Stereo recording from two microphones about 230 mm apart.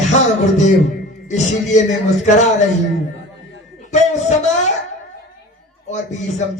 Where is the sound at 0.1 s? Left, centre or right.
Left.